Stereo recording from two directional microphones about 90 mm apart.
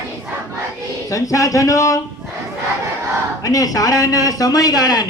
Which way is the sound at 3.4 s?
40° left (ahead or behind).